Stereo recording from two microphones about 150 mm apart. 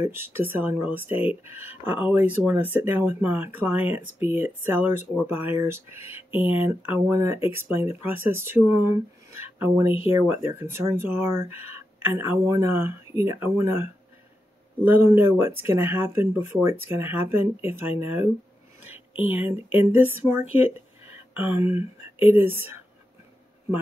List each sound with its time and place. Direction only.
0.0 s speech: 15° right (ahead or behind)
15.0 s speech: 15° right (ahead or behind)